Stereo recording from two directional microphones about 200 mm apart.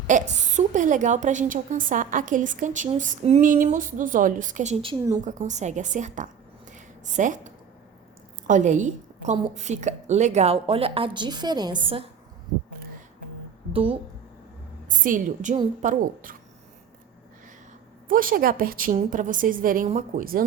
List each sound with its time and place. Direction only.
0.1 s speech: 40° right (ahead or behind)
6.7 s a sound: 40° right (ahead or behind)
8.4 s a woman's voice: 40° right (ahead or behind)
14.8 s speech: 40° right (ahead or behind)
18.1 s a woman's voice: 45° right (ahead or behind)